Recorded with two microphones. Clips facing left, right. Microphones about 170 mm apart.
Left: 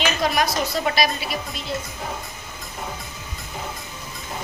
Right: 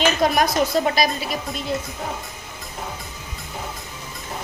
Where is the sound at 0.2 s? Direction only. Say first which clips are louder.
Right 2 dB; 50° right (ahead or behind).